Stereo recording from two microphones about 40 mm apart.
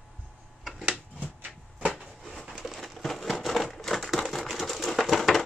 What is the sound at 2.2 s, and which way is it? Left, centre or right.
Crushing, centre.